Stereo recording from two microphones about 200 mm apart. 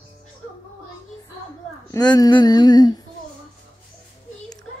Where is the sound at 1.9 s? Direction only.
20° left (ahead or behind).